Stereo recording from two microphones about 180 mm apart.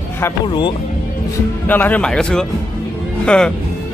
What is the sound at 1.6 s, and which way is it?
Speech, 10° left (ahead or behind).